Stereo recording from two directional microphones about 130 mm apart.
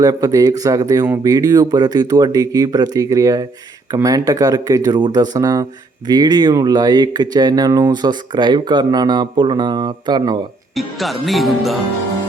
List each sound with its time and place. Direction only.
0.0 s speech: 30° right (ahead or behind)
10.8 s music: centre (ahead or behind)